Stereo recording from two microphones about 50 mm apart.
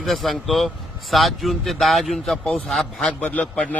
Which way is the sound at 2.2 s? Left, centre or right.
Centre.